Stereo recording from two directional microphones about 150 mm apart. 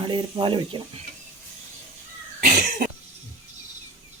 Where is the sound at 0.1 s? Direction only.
30° right (ahead or behind).